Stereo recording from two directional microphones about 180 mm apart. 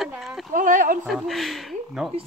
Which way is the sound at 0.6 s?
50° right (ahead or behind).